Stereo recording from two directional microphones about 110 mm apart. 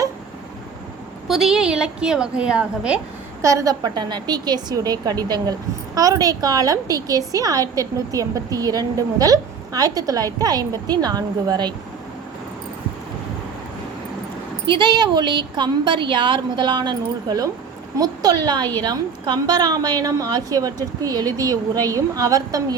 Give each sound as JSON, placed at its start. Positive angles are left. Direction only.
{"t": 1.3, "sound": "a woman's voice", "side_deg": -5}
{"t": 3.4, "sound": "a woman's voice", "side_deg": -30}
{"t": 14.7, "sound": "a woman's voice", "side_deg": -45}